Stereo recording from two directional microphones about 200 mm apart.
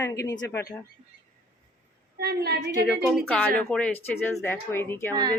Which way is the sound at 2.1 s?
50° right (ahead or behind).